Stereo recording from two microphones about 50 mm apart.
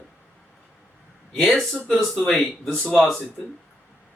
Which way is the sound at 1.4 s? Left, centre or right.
Centre.